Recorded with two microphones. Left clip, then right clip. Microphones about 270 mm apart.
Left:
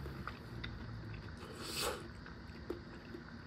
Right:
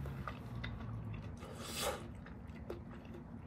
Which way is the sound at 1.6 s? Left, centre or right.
Left.